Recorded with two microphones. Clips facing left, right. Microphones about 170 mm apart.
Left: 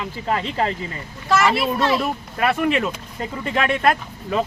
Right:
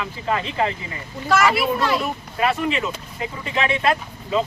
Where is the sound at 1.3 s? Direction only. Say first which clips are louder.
Even; centre (ahead or behind).